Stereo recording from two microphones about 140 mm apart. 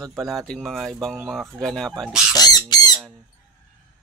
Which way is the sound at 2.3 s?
30° left (ahead or behind).